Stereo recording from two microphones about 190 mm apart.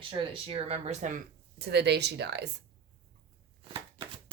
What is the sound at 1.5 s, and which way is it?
Speech, 60° right (ahead or behind).